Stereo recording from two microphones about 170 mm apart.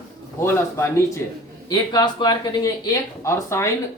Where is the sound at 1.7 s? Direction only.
25° left (ahead or behind).